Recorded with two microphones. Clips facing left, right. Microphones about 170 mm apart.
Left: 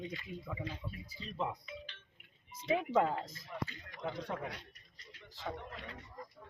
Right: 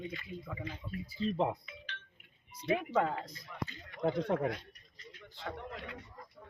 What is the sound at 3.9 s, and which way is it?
Speech, 50° right (ahead or behind).